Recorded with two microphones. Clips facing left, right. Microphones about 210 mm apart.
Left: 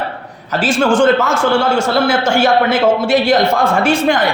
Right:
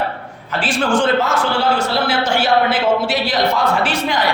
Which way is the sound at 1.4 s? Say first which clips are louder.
Left 4 dB; 45° left (ahead or behind).